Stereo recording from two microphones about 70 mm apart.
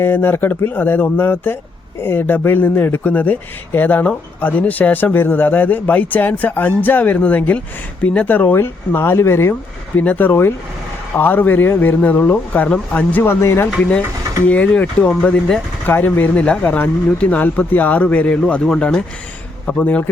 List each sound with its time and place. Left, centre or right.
0.0 s a man's voice: left
10.0 s a man's voice: left
13.2 s speech: left
14.4 s a man's voice: left
15.9 s a man's voice: left
16.3 s speech: centre
16.6 s a man's voice: left; by 19.0 s centre
19.6 s a man's voice: left